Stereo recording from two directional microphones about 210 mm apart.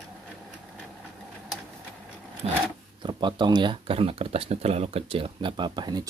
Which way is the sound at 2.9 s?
20° right (ahead or behind).